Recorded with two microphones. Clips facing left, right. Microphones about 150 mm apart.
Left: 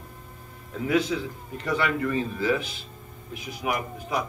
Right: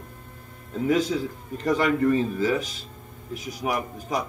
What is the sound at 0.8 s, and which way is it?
Speech, 40° right (ahead or behind).